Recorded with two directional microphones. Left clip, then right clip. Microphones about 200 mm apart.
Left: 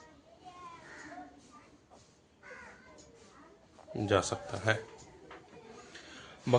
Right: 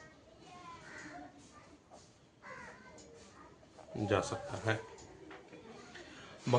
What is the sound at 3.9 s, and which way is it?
Speech, 45° left (ahead or behind).